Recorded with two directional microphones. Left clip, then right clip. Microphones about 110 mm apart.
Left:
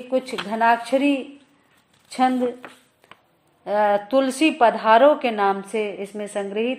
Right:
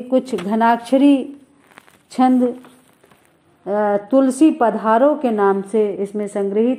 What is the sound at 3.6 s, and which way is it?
A woman's voice, 15° right (ahead or behind).